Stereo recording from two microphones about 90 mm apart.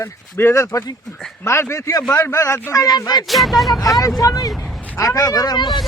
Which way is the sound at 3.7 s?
40° left (ahead or behind).